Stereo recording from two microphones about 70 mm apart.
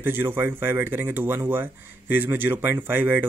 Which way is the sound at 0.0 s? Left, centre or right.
Right.